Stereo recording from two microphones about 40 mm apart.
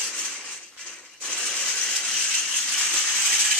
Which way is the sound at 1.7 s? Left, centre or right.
Centre.